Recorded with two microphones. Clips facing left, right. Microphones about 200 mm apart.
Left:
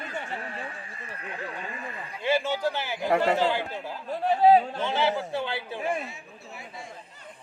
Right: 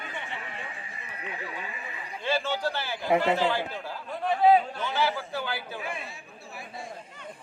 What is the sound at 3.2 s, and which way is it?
Speech, 40° left (ahead or behind).